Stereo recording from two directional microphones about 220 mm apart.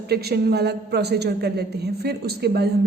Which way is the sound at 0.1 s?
45° right (ahead or behind).